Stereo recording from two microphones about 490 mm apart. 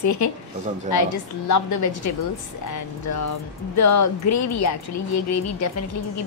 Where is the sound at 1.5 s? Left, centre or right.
Left.